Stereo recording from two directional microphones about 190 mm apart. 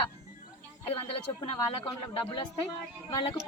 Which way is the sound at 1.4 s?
25° left (ahead or behind).